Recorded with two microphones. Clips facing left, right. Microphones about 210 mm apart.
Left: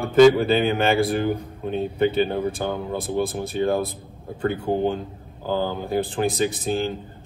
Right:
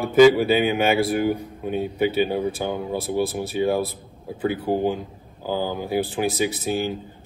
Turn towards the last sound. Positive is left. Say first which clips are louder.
# even
turn(degrees=-5)  # may be behind; listen again after turning